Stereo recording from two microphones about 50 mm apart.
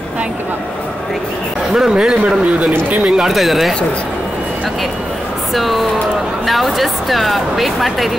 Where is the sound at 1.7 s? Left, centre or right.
Centre.